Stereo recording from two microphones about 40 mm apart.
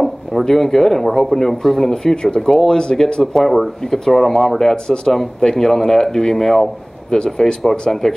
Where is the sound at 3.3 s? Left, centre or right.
Centre.